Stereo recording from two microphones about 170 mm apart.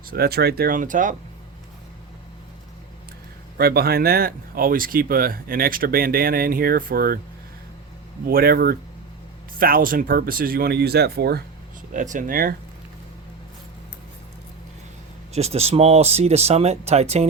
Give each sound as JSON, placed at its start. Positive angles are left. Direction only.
{"t": 0.1, "sound": "speech", "side_deg": -65}
{"t": 3.6, "sound": "speech", "side_deg": -65}
{"t": 8.3, "sound": "speech", "side_deg": -60}
{"t": 11.9, "sound": "speech", "side_deg": -50}
{"t": 15.3, "sound": "speech", "side_deg": -40}